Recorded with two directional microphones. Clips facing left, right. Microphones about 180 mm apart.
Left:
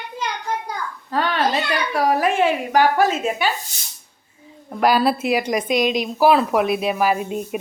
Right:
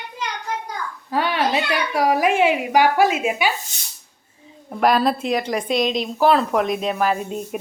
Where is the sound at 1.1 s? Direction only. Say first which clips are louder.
Even; 10° right (ahead or behind).